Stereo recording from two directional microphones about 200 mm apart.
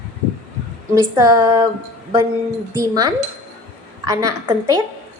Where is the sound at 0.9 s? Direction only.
20° right (ahead or behind).